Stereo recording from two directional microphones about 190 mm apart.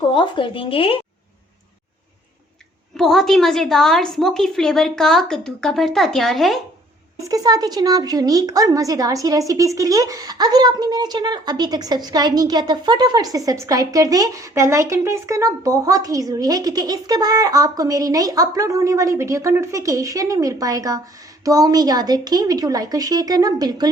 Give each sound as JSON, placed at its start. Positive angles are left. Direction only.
{"t": 0.1, "sound": "speech", "side_deg": 25}
{"t": 3.0, "sound": "a woman's voice", "side_deg": 0}
{"t": 7.2, "sound": "speech", "side_deg": -20}